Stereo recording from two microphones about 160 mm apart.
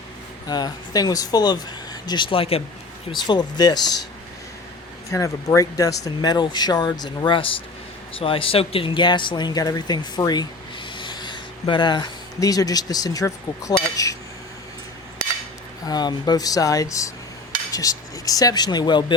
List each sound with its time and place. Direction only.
0.4 s speech: 25° left (ahead or behind)
3.1 s speech: 25° left (ahead or behind)
5.1 s speech: 20° left (ahead or behind)
15.9 s speech: 25° left (ahead or behind)